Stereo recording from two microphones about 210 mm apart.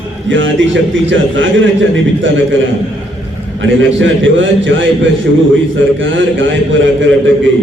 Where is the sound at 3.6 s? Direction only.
65° right (ahead or behind).